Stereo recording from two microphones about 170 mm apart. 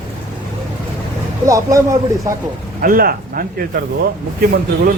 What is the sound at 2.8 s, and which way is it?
Speech, 60° right (ahead or behind).